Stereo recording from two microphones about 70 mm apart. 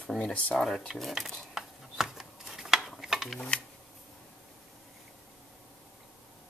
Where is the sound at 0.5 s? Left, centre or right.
Centre.